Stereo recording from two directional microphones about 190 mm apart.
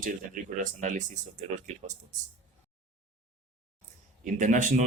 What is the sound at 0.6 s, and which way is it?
Speech, 40° right (ahead or behind).